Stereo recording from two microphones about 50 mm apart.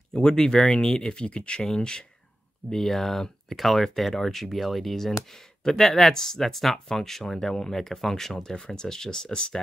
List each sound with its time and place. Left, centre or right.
0.2 s speech: centre